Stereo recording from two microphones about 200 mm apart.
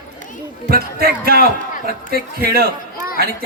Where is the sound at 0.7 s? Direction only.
50° right (ahead or behind).